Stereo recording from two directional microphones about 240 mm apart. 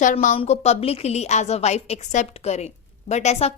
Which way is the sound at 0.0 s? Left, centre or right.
Left.